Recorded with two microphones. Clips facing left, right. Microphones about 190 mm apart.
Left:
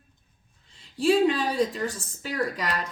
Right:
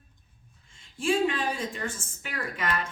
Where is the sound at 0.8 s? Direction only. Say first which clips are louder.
Left 5 dB; 35° left (ahead or behind).